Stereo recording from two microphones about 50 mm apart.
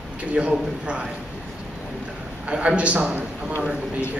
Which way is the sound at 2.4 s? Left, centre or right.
Right.